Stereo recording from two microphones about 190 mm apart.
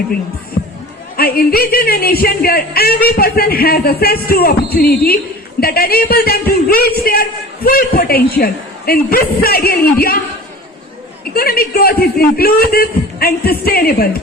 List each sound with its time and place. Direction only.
1.1 s speech: 50° left (ahead or behind)
11.3 s speech: 55° left (ahead or behind)